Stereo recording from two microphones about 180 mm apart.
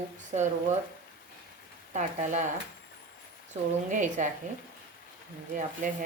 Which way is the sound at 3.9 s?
45° right (ahead or behind).